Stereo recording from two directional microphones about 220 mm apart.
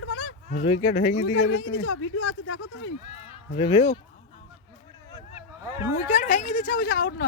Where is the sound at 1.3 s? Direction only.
65° left (ahead or behind).